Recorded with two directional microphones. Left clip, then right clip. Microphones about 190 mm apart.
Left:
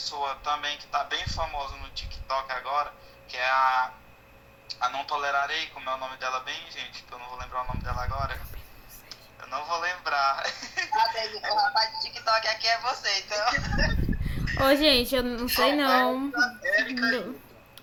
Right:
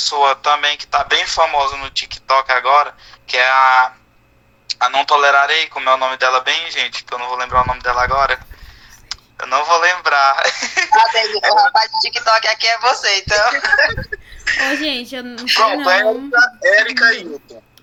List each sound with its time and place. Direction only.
0.0 s a man's voice: 50° right (ahead or behind)
14.7 s a woman's voice: 10° left (ahead or behind)
15.4 s a man's voice: 50° right (ahead or behind)